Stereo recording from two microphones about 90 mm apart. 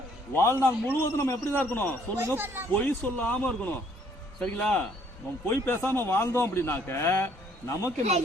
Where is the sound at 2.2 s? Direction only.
25° right (ahead or behind).